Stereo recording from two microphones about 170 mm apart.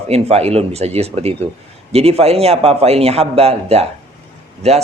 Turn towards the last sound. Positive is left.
turn(degrees=-40)  # may be behind; listen again after turning